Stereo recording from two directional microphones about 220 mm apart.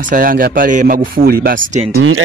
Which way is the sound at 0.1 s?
40° right (ahead or behind).